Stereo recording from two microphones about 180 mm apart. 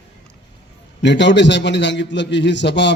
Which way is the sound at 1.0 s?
75° left (ahead or behind).